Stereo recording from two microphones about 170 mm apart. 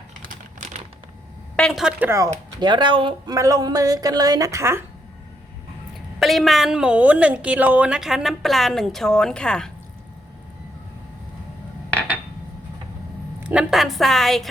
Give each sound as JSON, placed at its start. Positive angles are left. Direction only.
{"t": 1.5, "sound": "speech", "side_deg": 0}
{"t": 6.1, "sound": "speech", "side_deg": 0}
{"t": 13.4, "sound": "speech", "side_deg": -5}